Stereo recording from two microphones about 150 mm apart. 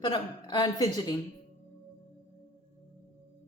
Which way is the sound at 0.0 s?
30° left (ahead or behind).